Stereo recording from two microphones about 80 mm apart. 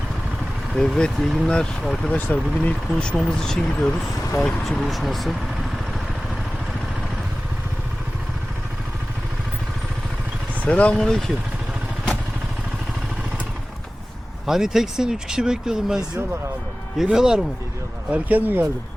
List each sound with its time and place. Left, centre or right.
0.7 s speech: centre
2.0 s speech: left; by 5.4 s centre
10.6 s speech: centre
14.4 s speech: centre
17.0 s speech: centre
18.1 s speech: right